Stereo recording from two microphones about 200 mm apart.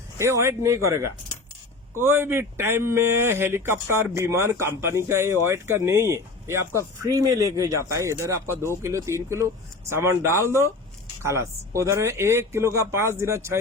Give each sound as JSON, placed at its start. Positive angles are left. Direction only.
{"t": 0.2, "sound": "a man's voice", "side_deg": -15}